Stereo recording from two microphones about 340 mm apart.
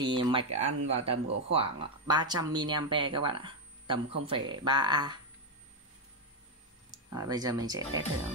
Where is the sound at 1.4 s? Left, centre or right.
Centre.